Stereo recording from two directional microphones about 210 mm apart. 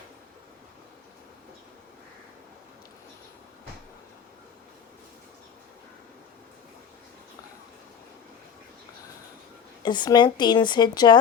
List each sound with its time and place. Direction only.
9.8 s a woman's voice: 20° left (ahead or behind)